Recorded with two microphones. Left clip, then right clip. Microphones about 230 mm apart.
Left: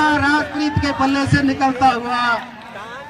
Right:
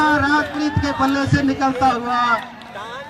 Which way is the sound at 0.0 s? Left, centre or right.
Left.